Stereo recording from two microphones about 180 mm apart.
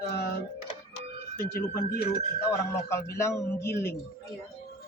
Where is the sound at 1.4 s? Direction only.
55° left (ahead or behind).